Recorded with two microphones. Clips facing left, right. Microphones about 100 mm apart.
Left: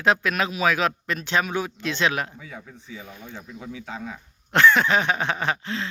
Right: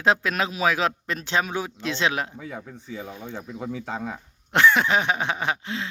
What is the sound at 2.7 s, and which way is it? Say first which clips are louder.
Speech: right 5 dB; 30° right (ahead or behind).